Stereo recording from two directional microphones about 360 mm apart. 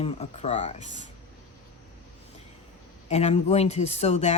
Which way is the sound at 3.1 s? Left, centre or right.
Centre.